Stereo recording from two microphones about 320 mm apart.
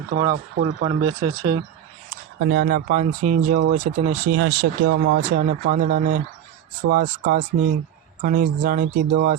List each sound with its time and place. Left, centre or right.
0.1 s speech: right
1.4 s speech: centre
2.0 s speech: right
4.3 s speech: right